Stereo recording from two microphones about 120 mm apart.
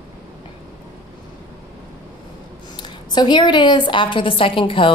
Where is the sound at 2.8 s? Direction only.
35° left (ahead or behind).